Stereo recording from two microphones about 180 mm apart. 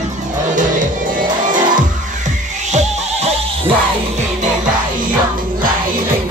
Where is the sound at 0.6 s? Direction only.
45° right (ahead or behind).